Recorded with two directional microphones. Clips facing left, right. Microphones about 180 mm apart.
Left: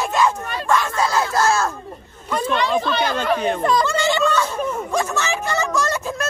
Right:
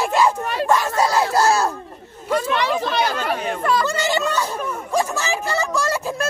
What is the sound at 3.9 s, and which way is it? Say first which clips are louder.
Speech: left 2 dB; 40° right (ahead or behind).